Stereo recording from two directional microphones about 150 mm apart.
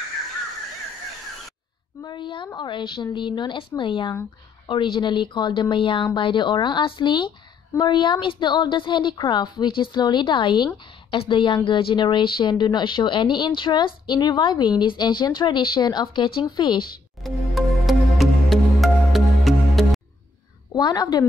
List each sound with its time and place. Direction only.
2.0 s a woman's voice: 30° left (ahead or behind)
17.2 s music: centre (ahead or behind)
20.7 s a woman's voice: 25° left (ahead or behind)